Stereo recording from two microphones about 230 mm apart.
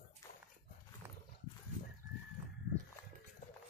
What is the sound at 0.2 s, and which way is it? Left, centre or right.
Dog, centre.